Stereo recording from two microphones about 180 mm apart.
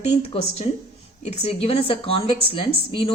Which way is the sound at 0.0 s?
35° left (ahead or behind).